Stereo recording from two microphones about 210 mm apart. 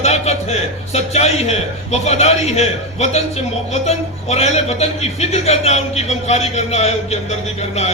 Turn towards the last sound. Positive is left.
turn(degrees=30)  # may be behind; listen again after turning